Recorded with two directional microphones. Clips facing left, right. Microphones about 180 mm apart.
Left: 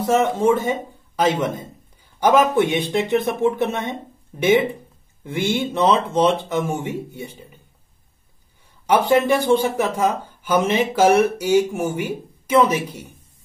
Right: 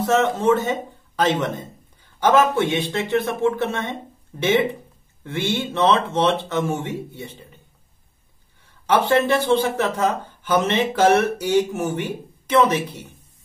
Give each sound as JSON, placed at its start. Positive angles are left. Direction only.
{"t": 0.0, "sound": "a man's voice", "side_deg": 10}
{"t": 8.8, "sound": "speech", "side_deg": 10}